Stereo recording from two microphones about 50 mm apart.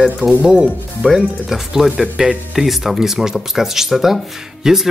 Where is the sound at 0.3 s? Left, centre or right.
Right.